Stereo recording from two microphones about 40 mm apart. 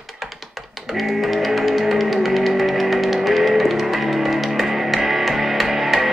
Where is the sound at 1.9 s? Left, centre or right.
Centre.